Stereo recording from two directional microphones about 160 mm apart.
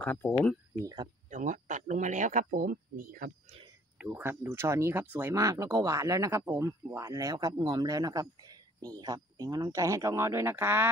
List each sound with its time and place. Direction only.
0.0 s speech: 15° left (ahead or behind)
0.7 s speech: 20° right (ahead or behind)
1.3 s speech: 50° right (ahead or behind)
4.0 s speech: 10° right (ahead or behind)